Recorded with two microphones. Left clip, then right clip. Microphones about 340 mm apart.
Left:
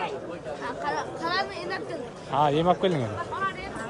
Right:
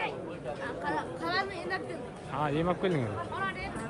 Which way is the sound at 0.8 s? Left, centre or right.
Centre.